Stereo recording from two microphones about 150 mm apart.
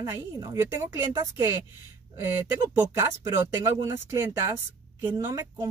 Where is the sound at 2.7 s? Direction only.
15° right (ahead or behind).